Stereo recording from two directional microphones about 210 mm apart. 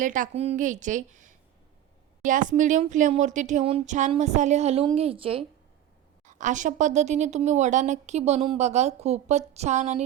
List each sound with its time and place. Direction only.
0.0 s speech: 40° right (ahead or behind)
6.2 s speech: 35° right (ahead or behind)